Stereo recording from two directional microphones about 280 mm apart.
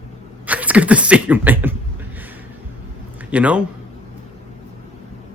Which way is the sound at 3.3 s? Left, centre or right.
Centre.